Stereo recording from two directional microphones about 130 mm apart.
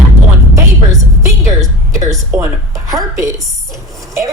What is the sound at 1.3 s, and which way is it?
A woman's voice, 25° right (ahead or behind).